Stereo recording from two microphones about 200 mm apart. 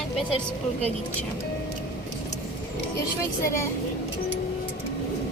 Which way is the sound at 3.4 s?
15° left (ahead or behind).